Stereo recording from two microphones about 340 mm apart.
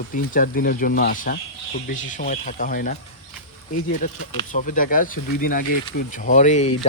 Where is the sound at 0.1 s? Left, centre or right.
Left.